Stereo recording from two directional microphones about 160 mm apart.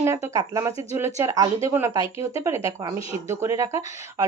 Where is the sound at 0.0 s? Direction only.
20° right (ahead or behind).